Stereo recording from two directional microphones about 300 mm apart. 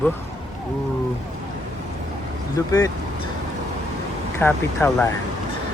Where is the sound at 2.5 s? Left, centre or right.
Centre.